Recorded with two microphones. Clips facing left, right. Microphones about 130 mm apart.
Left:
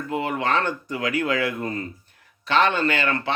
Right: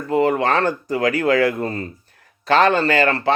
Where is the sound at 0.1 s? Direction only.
40° right (ahead or behind).